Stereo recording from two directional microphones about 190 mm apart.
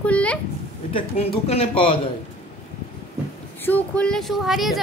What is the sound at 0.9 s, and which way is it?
Speech, 35° left (ahead or behind).